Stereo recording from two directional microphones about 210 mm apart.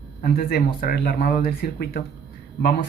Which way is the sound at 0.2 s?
45° left (ahead or behind).